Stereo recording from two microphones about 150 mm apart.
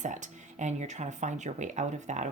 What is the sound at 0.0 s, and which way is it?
Speech, 55° right (ahead or behind).